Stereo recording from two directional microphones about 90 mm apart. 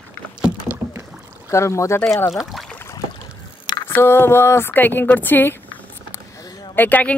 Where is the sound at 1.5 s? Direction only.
35° left (ahead or behind).